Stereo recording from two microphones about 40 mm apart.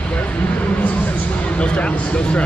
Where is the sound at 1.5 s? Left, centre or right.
Left.